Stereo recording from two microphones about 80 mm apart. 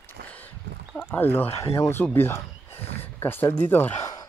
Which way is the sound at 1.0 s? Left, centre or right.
Left.